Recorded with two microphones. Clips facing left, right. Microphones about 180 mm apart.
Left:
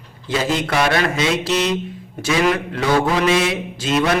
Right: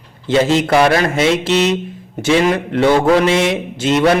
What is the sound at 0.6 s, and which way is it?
A man's voice, 30° right (ahead or behind).